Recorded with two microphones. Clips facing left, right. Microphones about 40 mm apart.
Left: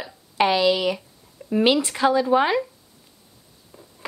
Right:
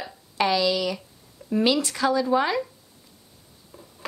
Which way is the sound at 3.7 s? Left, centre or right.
Centre.